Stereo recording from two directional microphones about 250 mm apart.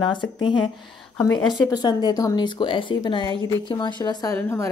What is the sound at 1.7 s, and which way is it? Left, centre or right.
A woman's voice, centre.